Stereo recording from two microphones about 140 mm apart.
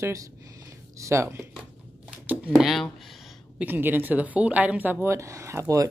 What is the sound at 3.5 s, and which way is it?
A woman's voice, 15° right (ahead or behind).